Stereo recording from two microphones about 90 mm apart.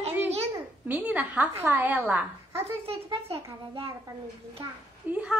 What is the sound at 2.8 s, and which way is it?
A child's voice, 90° right.